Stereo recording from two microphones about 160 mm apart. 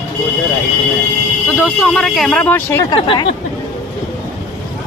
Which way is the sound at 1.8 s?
5° left (ahead or behind).